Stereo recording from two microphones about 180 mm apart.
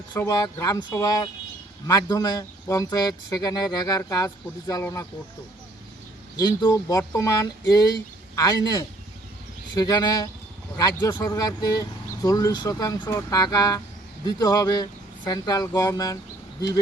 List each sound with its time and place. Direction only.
0.2 s speech: 20° left (ahead or behind)
6.3 s speech: 25° left (ahead or behind)